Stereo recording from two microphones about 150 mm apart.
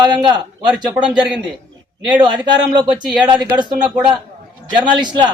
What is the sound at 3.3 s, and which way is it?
Speech, 30° right (ahead or behind).